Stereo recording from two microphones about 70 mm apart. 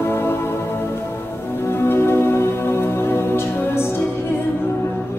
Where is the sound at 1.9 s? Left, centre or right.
Left.